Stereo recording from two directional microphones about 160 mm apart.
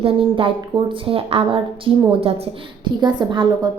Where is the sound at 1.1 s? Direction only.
35° right (ahead or behind).